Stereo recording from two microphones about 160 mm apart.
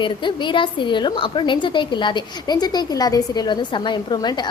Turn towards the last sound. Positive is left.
turn(degrees=25)  # may be behind; listen again after turning